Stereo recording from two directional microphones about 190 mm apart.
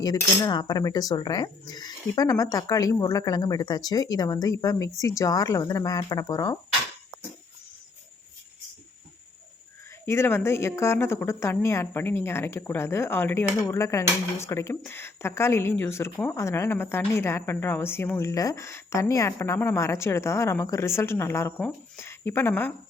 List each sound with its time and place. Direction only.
0.0 s a woman's voice: 20° left (ahead or behind)
10.1 s a woman's voice: 15° left (ahead or behind)